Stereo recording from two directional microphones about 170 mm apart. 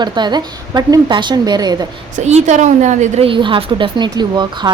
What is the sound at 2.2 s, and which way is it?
A woman's voice, 40° right (ahead or behind).